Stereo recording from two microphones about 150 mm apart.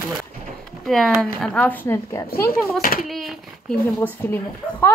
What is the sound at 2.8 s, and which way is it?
Speech, 75° left (ahead or behind).